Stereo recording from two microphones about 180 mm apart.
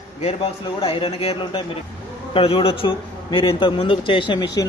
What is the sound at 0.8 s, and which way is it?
A man's voice, 30° left (ahead or behind).